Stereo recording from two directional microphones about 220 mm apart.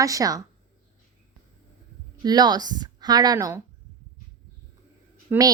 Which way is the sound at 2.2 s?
20° right (ahead or behind).